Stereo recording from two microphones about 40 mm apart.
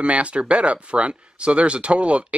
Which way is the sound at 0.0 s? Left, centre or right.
Right.